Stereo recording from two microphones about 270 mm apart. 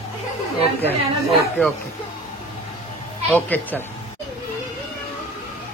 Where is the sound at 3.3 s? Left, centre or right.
Centre.